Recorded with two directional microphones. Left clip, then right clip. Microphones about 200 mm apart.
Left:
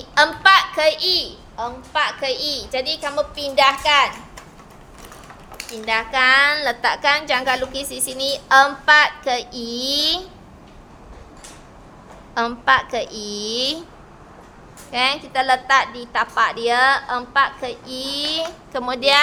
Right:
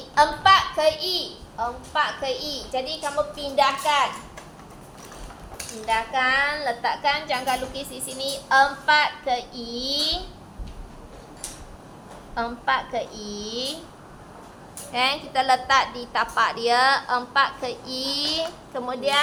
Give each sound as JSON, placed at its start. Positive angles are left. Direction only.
{"t": 0.1, "sound": "a woman's voice", "side_deg": 40}
{"t": 5.8, "sound": "a woman's voice", "side_deg": 55}
{"t": 12.3, "sound": "a woman's voice", "side_deg": 65}
{"t": 14.9, "sound": "a woman's voice", "side_deg": 25}
{"t": 18.7, "sound": "a woman's voice", "side_deg": 40}